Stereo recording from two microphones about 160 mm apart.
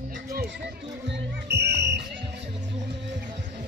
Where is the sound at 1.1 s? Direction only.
90° right.